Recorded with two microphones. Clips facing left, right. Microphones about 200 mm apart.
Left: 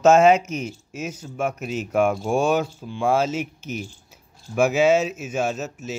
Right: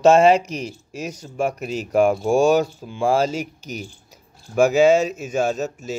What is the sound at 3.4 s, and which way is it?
Speech, 35° right (ahead or behind).